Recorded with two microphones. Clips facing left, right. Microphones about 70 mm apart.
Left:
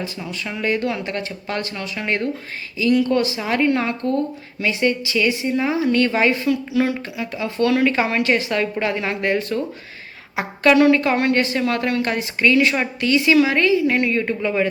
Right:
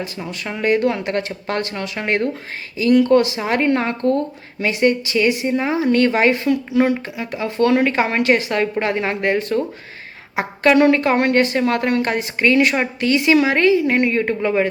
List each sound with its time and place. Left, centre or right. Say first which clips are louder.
0.4 s a woman's voice: right 5 dB; right